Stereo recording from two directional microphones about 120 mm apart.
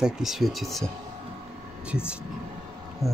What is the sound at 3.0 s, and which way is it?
Speech, 25° left (ahead or behind).